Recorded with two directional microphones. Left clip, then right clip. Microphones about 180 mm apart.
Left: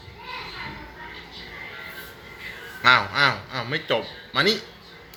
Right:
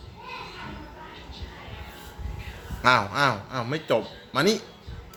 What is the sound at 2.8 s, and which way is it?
A man's voice, 35° right (ahead or behind).